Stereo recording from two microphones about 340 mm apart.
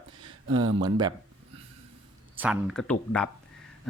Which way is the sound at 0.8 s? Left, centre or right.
Centre.